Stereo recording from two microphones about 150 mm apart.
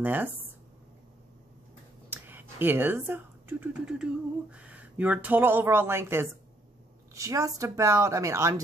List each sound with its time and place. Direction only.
0.0 s speech: 10° right (ahead or behind)
2.0 s a woman's voice: 15° right (ahead or behind)